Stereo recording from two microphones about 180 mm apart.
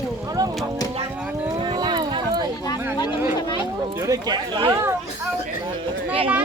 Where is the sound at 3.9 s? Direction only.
20° right (ahead or behind).